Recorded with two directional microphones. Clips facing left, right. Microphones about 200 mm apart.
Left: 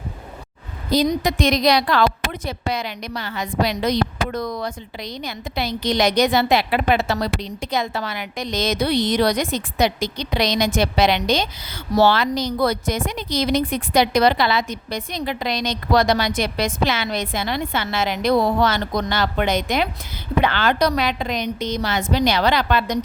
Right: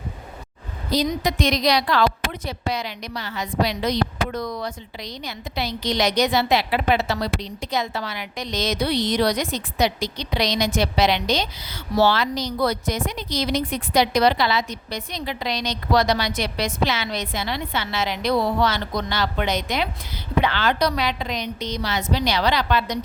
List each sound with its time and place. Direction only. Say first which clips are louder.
1.2 s a woman's voice: left 3 dB; 50° left (ahead or behind)